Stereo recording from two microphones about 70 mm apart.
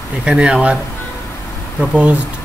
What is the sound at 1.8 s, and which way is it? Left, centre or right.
Speech, centre.